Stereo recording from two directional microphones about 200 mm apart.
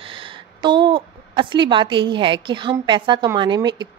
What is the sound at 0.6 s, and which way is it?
A woman's voice, 25° right (ahead or behind).